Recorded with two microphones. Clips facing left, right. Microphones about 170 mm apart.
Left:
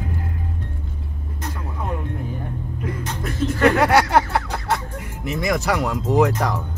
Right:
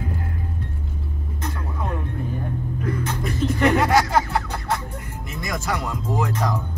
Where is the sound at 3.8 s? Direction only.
70° left (ahead or behind).